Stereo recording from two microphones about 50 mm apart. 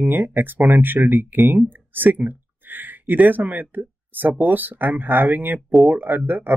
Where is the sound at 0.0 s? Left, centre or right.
Right.